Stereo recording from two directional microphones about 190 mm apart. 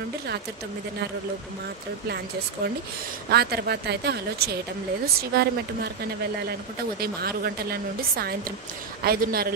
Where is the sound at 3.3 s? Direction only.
55° right (ahead or behind).